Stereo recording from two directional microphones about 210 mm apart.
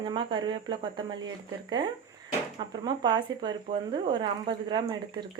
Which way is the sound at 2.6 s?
20° right (ahead or behind).